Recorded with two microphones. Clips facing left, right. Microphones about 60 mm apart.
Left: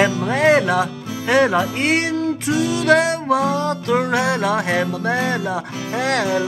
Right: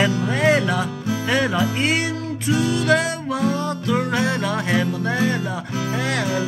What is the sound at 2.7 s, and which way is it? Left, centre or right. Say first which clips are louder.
Music: left 4 dB; left.